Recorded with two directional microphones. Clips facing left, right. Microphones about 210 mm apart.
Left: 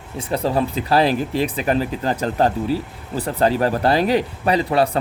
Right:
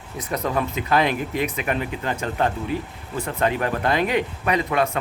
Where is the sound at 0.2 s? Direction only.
30° left (ahead or behind).